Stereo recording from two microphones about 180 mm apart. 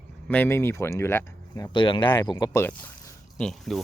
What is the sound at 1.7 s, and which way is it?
Speech, 25° left (ahead or behind).